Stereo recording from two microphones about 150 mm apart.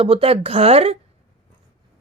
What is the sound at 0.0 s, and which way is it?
Speech, 40° right (ahead or behind).